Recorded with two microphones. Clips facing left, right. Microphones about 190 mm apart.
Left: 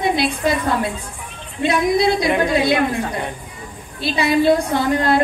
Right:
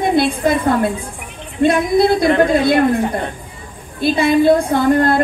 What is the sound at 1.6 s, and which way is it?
Speech, 50° right (ahead or behind).